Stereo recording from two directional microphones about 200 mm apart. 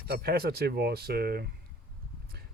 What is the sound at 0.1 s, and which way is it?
Speech, 50° right (ahead or behind).